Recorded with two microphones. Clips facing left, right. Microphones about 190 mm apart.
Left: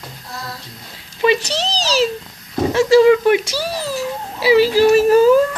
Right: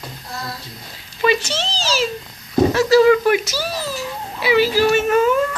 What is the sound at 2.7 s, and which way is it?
Speech, 25° left (ahead or behind).